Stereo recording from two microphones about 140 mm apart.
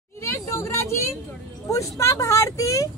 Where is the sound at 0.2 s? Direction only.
20° left (ahead or behind).